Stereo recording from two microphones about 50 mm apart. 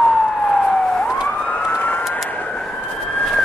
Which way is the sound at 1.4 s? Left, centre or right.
Left.